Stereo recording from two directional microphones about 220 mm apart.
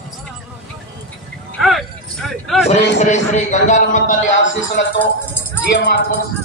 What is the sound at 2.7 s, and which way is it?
A man's voice, 30° left (ahead or behind).